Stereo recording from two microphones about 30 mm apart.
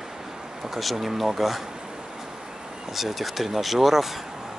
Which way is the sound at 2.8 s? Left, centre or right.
Centre.